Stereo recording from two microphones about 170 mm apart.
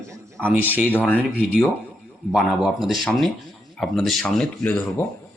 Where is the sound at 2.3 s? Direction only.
Centre (ahead or behind).